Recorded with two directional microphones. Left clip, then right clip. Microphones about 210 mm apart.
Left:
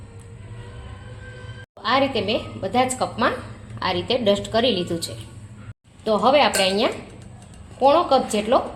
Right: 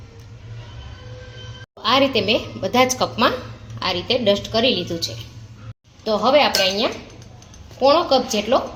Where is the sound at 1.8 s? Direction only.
15° right (ahead or behind).